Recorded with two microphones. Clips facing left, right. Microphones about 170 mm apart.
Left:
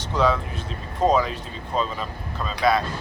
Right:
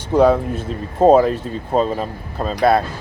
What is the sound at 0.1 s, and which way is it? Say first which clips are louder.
Speech: right 9 dB; 55° right (ahead or behind).